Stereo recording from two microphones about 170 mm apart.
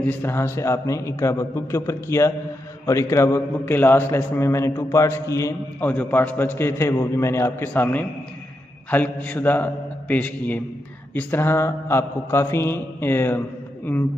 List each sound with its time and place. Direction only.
0.0 s a man's voice: 15° left (ahead or behind)